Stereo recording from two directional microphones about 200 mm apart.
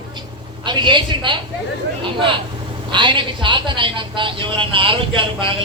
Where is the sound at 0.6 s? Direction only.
25° right (ahead or behind).